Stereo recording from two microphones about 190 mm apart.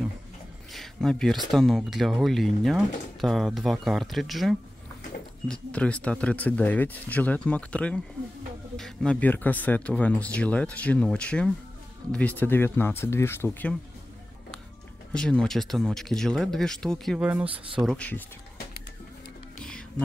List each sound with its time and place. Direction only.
0.7 s speech: 5° left (ahead or behind)
15.1 s speech: 5° left (ahead or behind)
17.5 s speech: 25° right (ahead or behind)
17.8 s speech: 5° left (ahead or behind)